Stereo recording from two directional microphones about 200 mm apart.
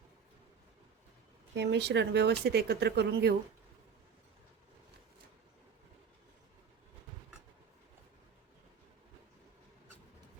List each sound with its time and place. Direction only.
1.5 s speech: 60° right (ahead or behind)